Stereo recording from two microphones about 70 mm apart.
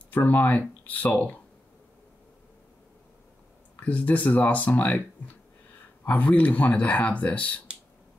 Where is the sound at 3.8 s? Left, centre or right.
Left.